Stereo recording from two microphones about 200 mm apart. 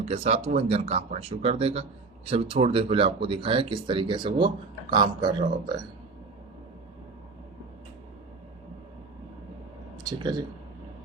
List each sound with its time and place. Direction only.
0.0 s speech: 30° right (ahead or behind)
10.0 s speech: 20° right (ahead or behind)